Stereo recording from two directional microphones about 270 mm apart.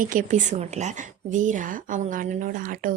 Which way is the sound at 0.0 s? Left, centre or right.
Right.